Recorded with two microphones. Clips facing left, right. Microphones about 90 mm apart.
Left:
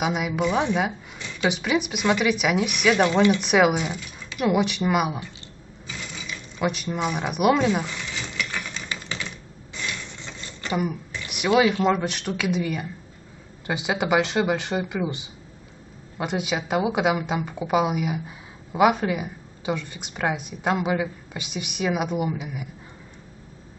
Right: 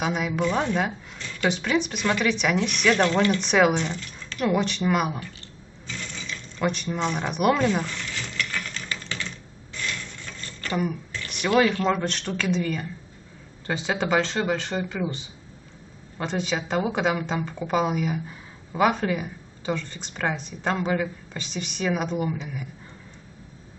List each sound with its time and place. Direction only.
0.0 s a woman's voice: 5° left (ahead or behind)
5.9 s mechanisms: 10° left (ahead or behind)
7.5 s a sound: 15° left (ahead or behind)
13.7 s a woman's voice: 10° left (ahead or behind)